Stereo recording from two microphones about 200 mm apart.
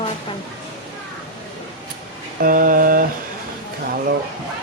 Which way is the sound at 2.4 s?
45° right (ahead or behind).